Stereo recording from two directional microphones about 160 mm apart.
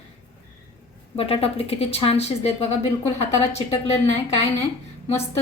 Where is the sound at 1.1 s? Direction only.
35° left (ahead or behind).